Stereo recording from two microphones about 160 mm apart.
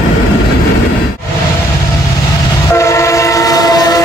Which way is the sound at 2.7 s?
20° left (ahead or behind).